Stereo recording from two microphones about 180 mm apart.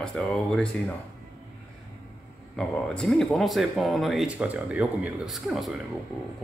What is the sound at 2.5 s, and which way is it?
Speech, 5° left (ahead or behind).